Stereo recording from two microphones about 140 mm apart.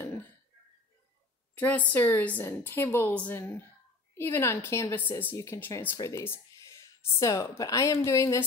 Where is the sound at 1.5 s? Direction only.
10° left (ahead or behind).